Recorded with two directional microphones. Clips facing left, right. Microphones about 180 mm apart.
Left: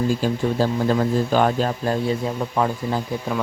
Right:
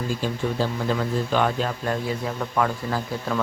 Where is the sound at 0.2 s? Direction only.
40° left (ahead or behind).